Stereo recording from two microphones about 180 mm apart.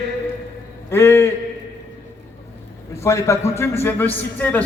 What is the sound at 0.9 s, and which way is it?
Speech, 15° left (ahead or behind).